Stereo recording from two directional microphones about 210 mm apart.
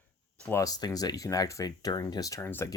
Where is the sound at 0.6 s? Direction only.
20° left (ahead or behind).